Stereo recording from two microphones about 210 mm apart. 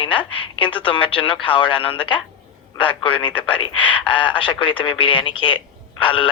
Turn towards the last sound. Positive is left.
turn(degrees=25)  # may be behind; listen again after turning